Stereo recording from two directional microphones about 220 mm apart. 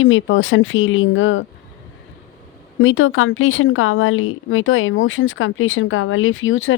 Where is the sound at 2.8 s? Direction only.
65° left (ahead or behind).